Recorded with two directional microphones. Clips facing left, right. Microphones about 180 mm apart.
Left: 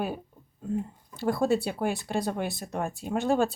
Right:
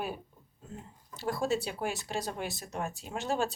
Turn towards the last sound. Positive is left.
turn(degrees=55)  # may be behind; listen again after turning